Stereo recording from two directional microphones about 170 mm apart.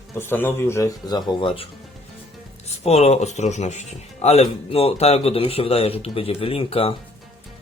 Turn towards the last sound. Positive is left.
turn(degrees=35)  # may be behind; listen again after turning